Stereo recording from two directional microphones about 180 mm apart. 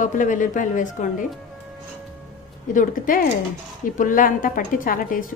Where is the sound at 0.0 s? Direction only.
45° left (ahead or behind).